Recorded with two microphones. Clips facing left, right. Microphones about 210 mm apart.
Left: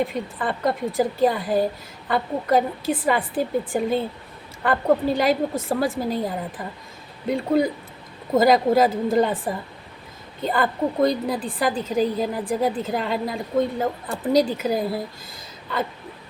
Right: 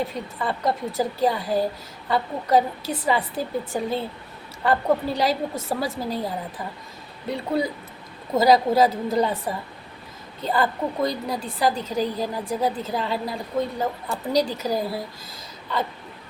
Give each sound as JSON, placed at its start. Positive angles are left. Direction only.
{"t": 0.3, "sound": "a woman's voice", "side_deg": 50}
{"t": 7.3, "sound": "a woman's voice", "side_deg": 50}